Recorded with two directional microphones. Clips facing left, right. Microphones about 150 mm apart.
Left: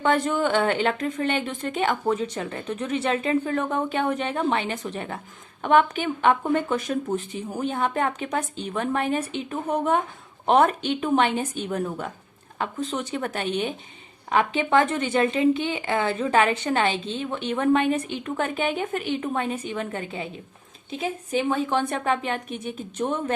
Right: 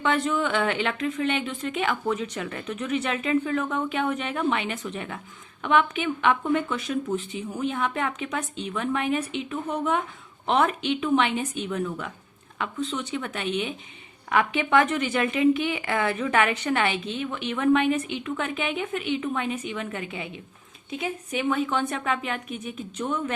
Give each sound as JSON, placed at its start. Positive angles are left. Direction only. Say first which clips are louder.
{"t": 0.0, "sound": "speech", "louder": "left 2 dB", "side_deg": 40}